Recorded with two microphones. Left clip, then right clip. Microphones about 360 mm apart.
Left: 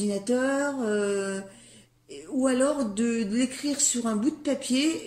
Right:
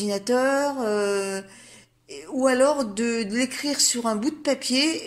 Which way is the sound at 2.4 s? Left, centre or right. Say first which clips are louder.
Right 5 dB; centre.